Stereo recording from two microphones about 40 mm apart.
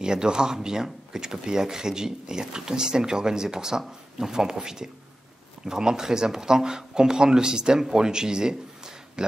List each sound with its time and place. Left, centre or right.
0.0 s a man's voice: centre